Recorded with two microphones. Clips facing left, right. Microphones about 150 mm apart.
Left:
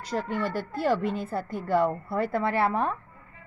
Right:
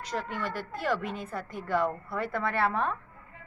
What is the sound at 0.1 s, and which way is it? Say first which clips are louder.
Speech: left 5 dB; 35° left (ahead or behind).